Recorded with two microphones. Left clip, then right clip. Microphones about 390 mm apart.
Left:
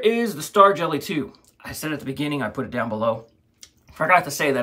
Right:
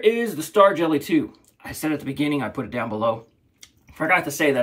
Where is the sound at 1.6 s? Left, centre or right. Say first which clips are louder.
Right 3 dB; left.